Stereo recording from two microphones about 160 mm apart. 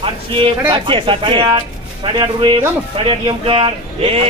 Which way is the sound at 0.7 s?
30° right (ahead or behind).